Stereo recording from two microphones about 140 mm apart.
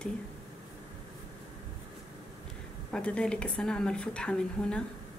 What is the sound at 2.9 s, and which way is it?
A woman's voice, 5° left (ahead or behind).